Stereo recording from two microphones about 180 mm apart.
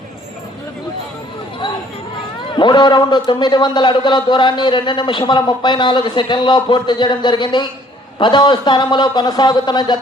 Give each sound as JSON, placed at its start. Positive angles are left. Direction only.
{"t": 2.6, "sound": "a man's voice", "side_deg": 25}